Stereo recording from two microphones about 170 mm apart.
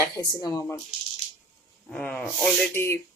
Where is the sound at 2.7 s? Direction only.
15° left (ahead or behind).